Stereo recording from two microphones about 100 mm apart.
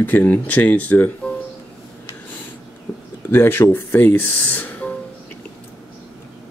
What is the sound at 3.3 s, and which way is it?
Speech, 20° left (ahead or behind).